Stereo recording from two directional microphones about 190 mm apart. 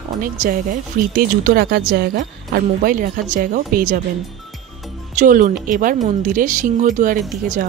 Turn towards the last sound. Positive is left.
turn(degrees=-45)  # may be behind; listen again after turning